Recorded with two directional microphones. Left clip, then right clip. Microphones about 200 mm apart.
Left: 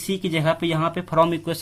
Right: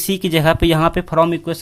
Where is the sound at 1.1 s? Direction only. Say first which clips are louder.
Even; 15° right (ahead or behind).